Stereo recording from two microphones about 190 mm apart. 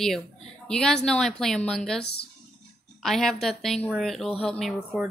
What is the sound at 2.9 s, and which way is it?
A woman's voice, centre (ahead or behind).